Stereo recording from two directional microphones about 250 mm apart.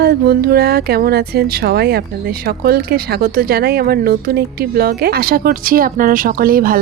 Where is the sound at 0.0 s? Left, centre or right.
Right.